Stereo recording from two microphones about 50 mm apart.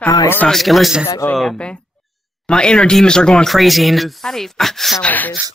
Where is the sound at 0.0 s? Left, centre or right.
Left.